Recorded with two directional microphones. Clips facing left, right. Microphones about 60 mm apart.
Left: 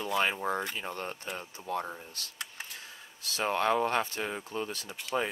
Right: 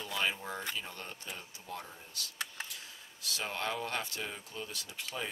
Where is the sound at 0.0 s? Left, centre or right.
Left.